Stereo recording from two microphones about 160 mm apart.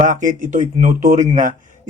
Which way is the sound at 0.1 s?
50° right (ahead or behind).